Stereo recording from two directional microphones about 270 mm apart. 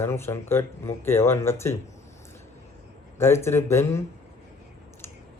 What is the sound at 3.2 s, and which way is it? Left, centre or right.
Speech, centre.